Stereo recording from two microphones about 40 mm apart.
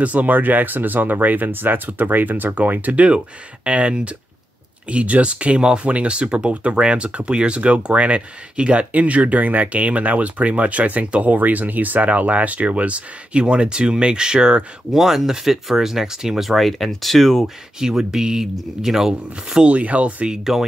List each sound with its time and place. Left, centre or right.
0.0 s speech: right
3.6 s speech: right
14.9 s speech: centre
17.7 s speech: centre
19.6 s speech: right